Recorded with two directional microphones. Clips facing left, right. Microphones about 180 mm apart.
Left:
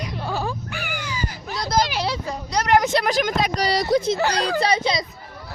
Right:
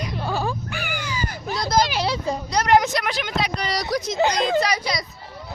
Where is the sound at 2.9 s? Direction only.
40° left (ahead or behind).